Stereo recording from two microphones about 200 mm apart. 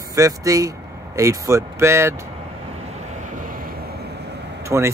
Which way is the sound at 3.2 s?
45° right (ahead or behind).